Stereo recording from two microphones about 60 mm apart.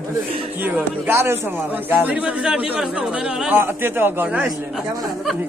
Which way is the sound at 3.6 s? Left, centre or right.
Right.